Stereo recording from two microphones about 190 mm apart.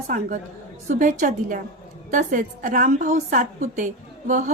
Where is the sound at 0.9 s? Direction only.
45° right (ahead or behind).